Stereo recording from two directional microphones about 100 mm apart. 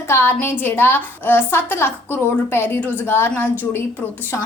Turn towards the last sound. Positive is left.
turn(degrees=20)  # may be behind; listen again after turning